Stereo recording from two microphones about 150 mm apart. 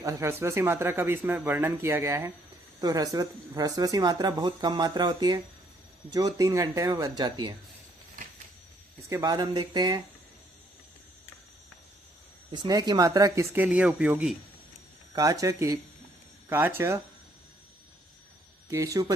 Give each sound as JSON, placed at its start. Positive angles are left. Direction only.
{"t": 0.0, "sound": "speech", "side_deg": -20}
{"t": 9.0, "sound": "speech", "side_deg": -25}
{"t": 12.5, "sound": "speech", "side_deg": -25}
{"t": 15.1, "sound": "speech", "side_deg": -25}
{"t": 18.7, "sound": "speech", "side_deg": -20}